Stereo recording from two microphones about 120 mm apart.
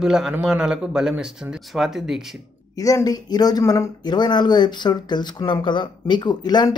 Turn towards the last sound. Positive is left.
turn(degrees=35)  # may be behind; listen again after turning